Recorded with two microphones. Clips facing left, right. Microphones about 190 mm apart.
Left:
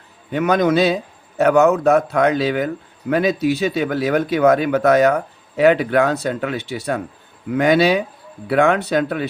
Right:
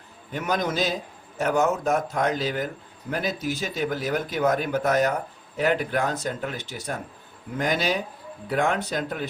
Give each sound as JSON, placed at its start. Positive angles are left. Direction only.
{"t": 0.3, "sound": "speech", "side_deg": 70}